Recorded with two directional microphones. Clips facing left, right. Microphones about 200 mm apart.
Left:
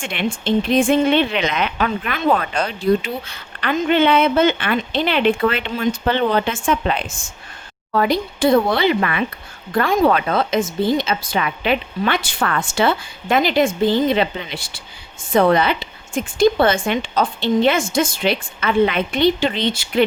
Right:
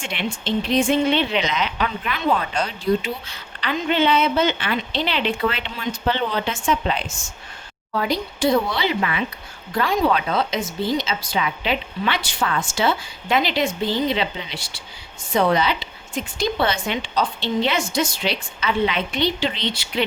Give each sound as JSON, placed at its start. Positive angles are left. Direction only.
{"t": 0.0, "sound": "speech", "side_deg": 55}